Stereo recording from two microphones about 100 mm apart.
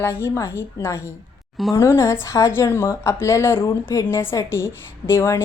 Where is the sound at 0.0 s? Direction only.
25° left (ahead or behind).